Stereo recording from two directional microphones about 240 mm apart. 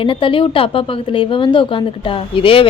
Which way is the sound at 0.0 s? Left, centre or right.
Left.